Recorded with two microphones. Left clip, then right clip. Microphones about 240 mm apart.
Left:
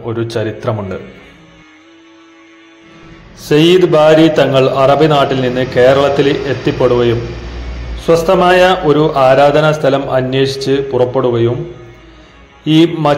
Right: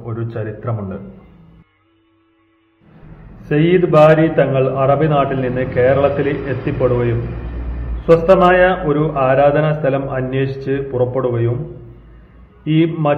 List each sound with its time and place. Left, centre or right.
0.0 s a man's voice: left
3.4 s a man's voice: left
12.6 s a man's voice: centre